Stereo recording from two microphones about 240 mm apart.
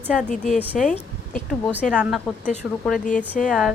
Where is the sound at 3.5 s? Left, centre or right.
Centre.